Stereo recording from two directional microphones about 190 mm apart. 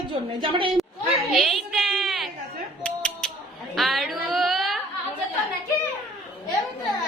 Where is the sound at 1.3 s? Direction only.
Centre (ahead or behind).